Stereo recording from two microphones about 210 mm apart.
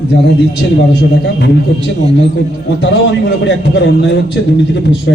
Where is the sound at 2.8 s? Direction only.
60° left (ahead or behind).